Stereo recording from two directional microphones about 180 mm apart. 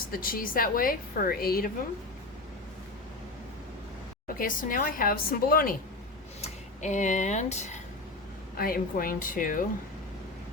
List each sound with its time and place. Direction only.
0.1 s a woman's voice: 50° left (ahead or behind)
4.4 s a woman's voice: 50° left (ahead or behind)
6.4 s speech: 40° left (ahead or behind)
8.5 s a woman's voice: 55° left (ahead or behind)